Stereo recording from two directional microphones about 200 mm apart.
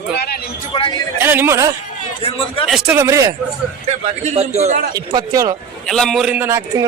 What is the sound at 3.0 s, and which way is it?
Speech, 15° right (ahead or behind).